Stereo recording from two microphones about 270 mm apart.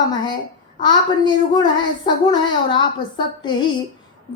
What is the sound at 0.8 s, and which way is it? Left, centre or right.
A woman's voice, centre.